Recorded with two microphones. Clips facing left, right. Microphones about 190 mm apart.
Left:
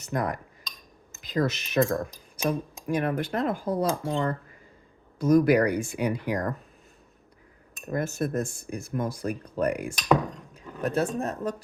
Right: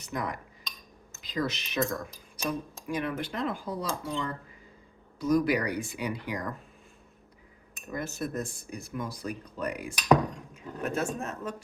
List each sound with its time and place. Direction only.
0.0 s speech: 50° left (ahead or behind)
7.9 s speech: 50° left (ahead or behind)
10.5 s speech: 35° left (ahead or behind)